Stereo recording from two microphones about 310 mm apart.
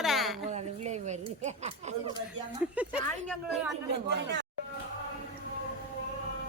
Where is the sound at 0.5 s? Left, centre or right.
Right.